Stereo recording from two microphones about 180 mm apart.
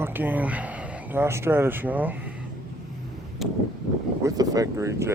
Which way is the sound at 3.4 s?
Centre (ahead or behind).